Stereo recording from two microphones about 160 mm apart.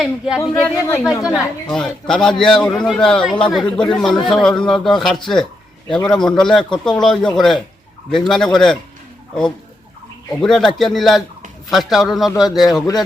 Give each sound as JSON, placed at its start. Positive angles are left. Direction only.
{"t": 0.0, "sound": "a man's voice", "side_deg": -5}
{"t": 0.5, "sound": "speech", "side_deg": 15}
{"t": 1.0, "sound": "a man's voice", "side_deg": -5}
{"t": 10.4, "sound": "a man's voice", "side_deg": 0}